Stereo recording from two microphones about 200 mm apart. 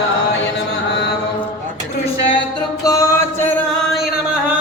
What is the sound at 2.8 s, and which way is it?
Music, 15° left (ahead or behind).